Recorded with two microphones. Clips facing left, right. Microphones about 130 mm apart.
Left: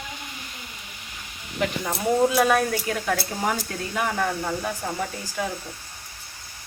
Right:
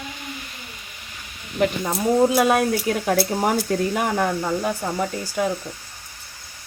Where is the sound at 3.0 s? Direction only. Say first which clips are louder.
Right 7 dB; 35° right (ahead or behind).